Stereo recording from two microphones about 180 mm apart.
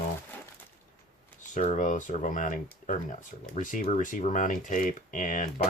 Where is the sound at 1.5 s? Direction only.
40° left (ahead or behind).